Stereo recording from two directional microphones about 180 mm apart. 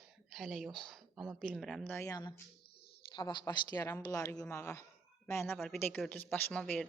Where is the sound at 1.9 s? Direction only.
20° left (ahead or behind).